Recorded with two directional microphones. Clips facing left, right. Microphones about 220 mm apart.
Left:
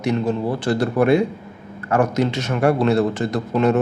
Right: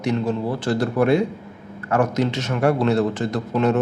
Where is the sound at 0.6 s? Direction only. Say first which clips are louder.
Left 2 dB; 65° left (ahead or behind).